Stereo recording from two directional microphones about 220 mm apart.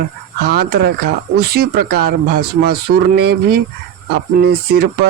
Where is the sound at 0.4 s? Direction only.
45° right (ahead or behind).